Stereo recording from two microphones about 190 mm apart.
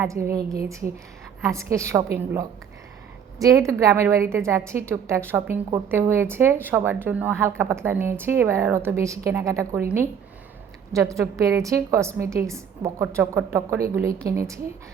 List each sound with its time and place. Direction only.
0.0 s a woman's voice: 15° right (ahead or behind)
1.5 s a woman's voice: 15° right (ahead or behind)